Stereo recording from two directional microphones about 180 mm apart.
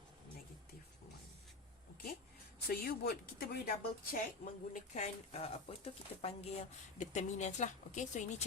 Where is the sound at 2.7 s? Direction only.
60° left (ahead or behind).